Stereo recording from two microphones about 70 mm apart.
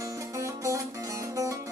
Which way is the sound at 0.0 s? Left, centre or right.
Right.